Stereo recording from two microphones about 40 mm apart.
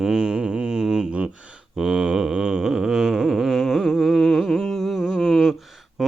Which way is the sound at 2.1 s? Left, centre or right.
Centre.